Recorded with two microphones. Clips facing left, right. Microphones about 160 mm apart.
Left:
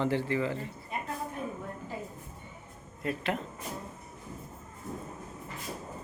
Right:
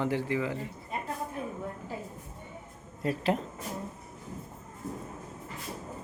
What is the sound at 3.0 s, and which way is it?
Speech, 35° right (ahead or behind).